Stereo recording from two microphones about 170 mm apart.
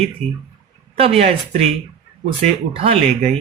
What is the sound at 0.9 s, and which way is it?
Speech, 35° right (ahead or behind).